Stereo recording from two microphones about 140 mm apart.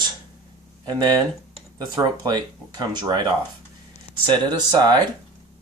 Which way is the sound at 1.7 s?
30° right (ahead or behind).